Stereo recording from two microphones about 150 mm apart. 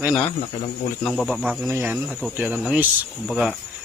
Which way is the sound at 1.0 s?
5° left (ahead or behind).